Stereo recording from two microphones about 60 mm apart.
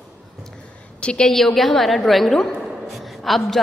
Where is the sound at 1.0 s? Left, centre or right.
Centre.